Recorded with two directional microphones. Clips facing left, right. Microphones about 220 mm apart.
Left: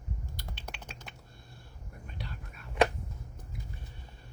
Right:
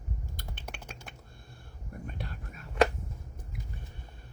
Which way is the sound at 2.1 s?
50° right (ahead or behind).